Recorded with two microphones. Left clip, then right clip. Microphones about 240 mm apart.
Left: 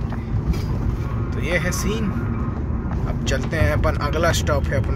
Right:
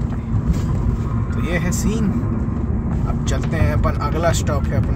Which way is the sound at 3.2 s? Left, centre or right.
Centre.